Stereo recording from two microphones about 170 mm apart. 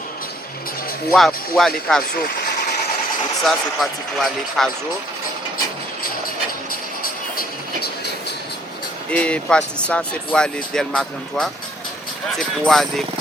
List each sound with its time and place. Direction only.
1.1 s speech: centre (ahead or behind)
2.1 s vehicle: 60° left (ahead or behind)
3.4 s speech: centre (ahead or behind)
7.0 s music: 55° left (ahead or behind)
9.0 s speech: 5° left (ahead or behind)